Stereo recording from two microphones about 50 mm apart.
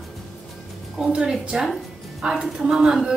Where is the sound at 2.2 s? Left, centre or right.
Centre.